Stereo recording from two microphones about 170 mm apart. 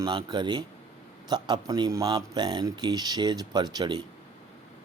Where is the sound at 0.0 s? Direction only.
25° right (ahead or behind).